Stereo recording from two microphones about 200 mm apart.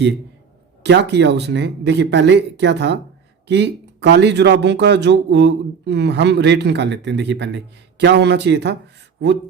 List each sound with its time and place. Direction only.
0.8 s speech: 55° right (ahead or behind)